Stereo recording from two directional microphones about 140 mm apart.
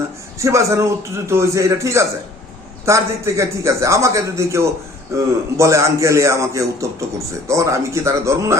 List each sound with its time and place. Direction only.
0.3 s a man's voice: 20° right (ahead or behind)